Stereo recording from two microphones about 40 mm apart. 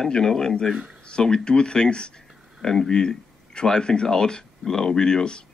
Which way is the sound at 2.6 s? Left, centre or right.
Centre.